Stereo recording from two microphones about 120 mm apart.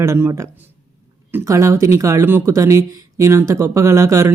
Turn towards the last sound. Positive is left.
turn(degrees=-20)  # may be behind; listen again after turning